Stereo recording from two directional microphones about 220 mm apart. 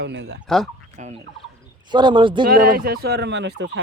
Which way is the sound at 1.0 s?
30° right (ahead or behind).